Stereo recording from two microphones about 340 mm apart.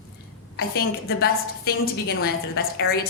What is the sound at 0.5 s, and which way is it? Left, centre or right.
A woman's voice, left.